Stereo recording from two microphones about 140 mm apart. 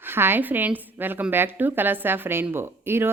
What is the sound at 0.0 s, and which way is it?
A woman's voice, 15° right (ahead or behind).